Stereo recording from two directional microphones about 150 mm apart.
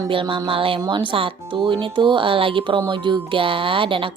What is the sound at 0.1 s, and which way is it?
Speech, 35° right (ahead or behind).